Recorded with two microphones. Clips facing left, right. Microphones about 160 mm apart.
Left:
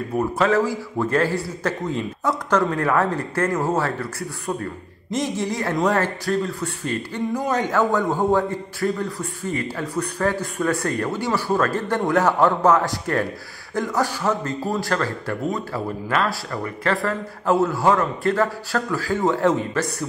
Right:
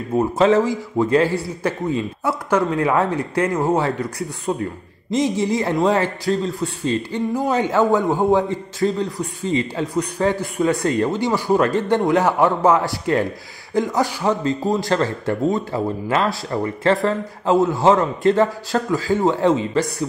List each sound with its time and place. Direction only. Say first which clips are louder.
0.1 s a man's voice: right 5 dB; 20° right (ahead or behind)